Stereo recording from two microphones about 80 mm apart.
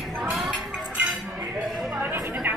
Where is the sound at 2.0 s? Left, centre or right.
Right.